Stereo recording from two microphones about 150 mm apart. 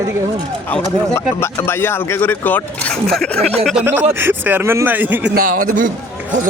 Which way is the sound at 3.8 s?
15° right (ahead or behind).